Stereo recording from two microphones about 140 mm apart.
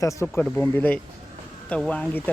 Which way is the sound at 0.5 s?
10° left (ahead or behind).